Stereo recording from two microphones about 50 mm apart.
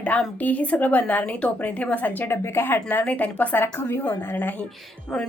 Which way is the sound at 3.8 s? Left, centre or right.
Left.